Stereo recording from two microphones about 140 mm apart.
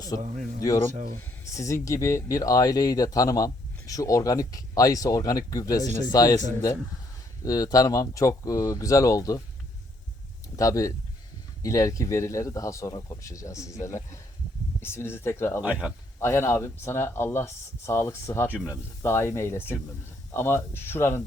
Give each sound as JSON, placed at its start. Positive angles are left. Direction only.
{"t": 0.2, "sound": "speech", "side_deg": -60}
{"t": 1.5, "sound": "speech", "side_deg": 20}
{"t": 7.4, "sound": "speech", "side_deg": 25}
{"t": 10.6, "sound": "speech", "side_deg": 25}
{"t": 18.5, "sound": "speech", "side_deg": -10}
{"t": 19.0, "sound": "speech", "side_deg": 20}